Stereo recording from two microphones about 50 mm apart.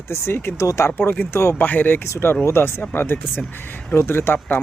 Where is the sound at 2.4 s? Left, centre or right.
Left.